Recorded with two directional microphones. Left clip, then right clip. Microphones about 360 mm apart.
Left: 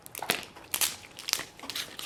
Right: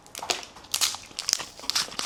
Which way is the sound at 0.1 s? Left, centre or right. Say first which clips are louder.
Right 2 dB; centre.